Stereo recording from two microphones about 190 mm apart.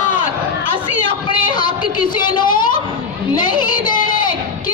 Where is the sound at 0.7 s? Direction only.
25° left (ahead or behind).